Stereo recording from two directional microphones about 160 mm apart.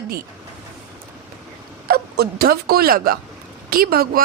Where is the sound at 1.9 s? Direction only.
75° right (ahead or behind).